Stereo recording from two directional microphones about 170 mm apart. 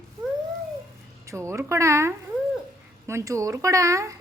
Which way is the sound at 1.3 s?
15° right (ahead or behind).